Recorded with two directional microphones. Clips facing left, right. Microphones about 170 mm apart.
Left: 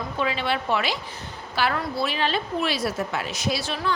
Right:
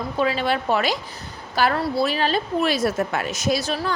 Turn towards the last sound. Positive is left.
turn(degrees=-40)  # may be behind; listen again after turning